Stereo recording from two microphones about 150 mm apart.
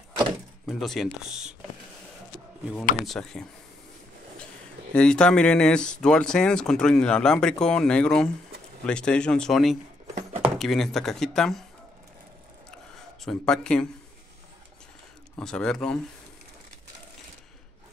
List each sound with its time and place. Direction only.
0.7 s speech: centre (ahead or behind)
3.1 s speech: 5° left (ahead or behind)
4.9 s speech: 5° left (ahead or behind)
10.1 s a sound: 40° right (ahead or behind)
10.6 s speech: centre (ahead or behind)
13.2 s speech: 5° left (ahead or behind)
15.3 s speech: 5° left (ahead or behind)